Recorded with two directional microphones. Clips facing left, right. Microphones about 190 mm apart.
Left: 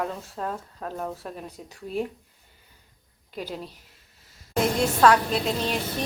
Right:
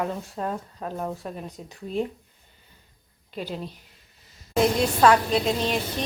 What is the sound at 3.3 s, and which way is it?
Speech, 10° left (ahead or behind).